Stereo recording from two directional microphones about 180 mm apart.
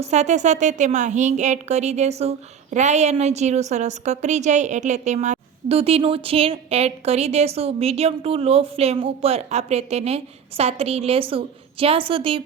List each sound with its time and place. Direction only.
0.0 s a woman's voice: 40° right (ahead or behind)